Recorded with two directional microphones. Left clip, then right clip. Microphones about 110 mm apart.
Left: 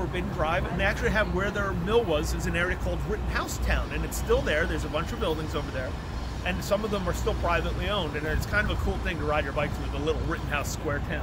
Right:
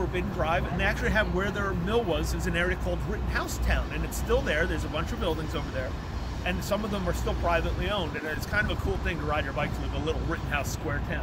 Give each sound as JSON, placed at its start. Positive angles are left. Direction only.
{"t": 0.1, "sound": "speech", "side_deg": 15}
{"t": 6.4, "sound": "speech", "side_deg": 20}